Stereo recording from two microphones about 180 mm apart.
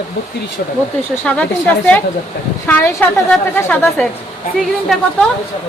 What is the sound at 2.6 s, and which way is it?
Speech, 10° left (ahead or behind).